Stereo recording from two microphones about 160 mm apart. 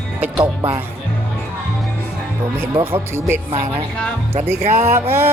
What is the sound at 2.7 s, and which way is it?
Speech, 35° right (ahead or behind).